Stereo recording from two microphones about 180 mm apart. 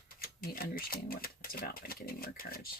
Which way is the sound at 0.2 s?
55° left (ahead or behind).